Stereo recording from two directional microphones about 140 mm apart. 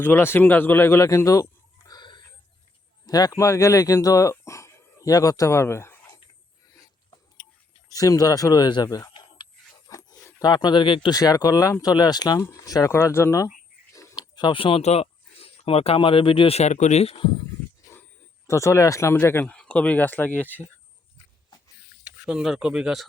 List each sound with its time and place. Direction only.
0.0 s a man's voice: 15° left (ahead or behind)
1.9 s chicken: 30° left (ahead or behind)
3.1 s speech: 25° left (ahead or behind)
7.9 s speech: 25° left (ahead or behind)
11.2 s speech: 25° left (ahead or behind)
18.4 s a man's voice: 20° left (ahead or behind)
22.0 s speech: 5° right (ahead or behind)